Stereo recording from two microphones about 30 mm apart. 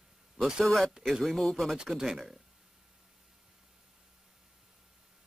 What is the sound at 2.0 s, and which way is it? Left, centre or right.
Speech, centre.